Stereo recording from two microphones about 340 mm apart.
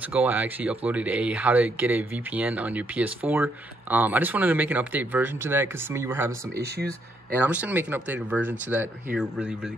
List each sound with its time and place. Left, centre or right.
0.1 s speech: centre
6.5 s speech: right
7.3 s speech: centre